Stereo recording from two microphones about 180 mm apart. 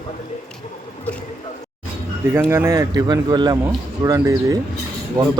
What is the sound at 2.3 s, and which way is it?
Speech, 15° right (ahead or behind).